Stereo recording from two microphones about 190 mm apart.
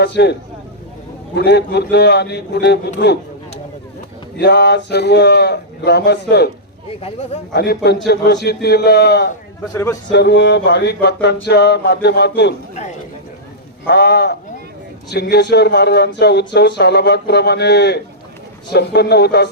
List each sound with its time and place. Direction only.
0.0 s speech: 60° left (ahead or behind)
1.4 s speech: 60° left (ahead or behind)
4.4 s speech: 60° left (ahead or behind)
7.5 s speech: 60° left (ahead or behind)
9.7 s a man's voice: 15° left (ahead or behind)
10.1 s speech: 65° left (ahead or behind)
13.8 s speech: 60° left (ahead or behind)